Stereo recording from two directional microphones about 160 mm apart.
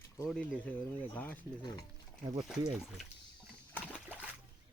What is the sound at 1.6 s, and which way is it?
Speech, 25° left (ahead or behind).